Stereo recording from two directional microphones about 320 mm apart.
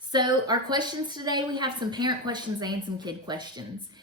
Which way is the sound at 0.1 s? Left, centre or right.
Centre.